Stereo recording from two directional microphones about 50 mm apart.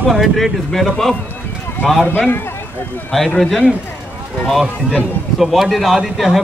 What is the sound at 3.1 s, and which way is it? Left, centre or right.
Speech, centre.